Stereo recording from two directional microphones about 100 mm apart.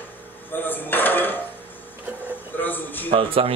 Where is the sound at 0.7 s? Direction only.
20° left (ahead or behind).